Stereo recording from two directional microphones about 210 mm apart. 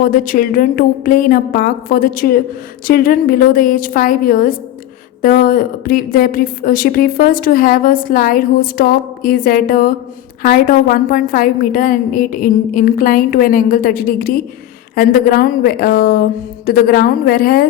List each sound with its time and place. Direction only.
0.0 s a woman's voice: 40° left (ahead or behind)